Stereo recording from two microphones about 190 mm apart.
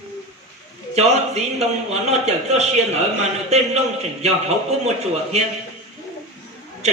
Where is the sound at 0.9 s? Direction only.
35° right (ahead or behind).